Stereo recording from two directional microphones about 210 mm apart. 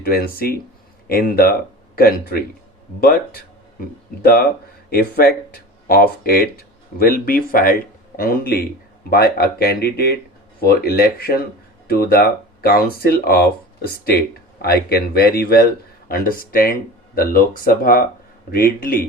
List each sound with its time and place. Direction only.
0.0 s speech: 45° left (ahead or behind)